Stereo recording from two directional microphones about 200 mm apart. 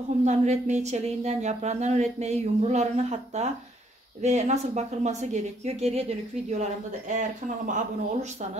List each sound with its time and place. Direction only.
0.2 s speech: 35° right (ahead or behind)